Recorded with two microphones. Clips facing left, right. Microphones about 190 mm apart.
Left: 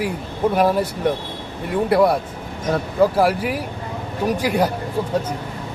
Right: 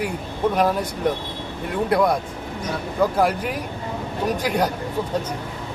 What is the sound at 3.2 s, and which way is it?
A man's voice, 5° left (ahead or behind).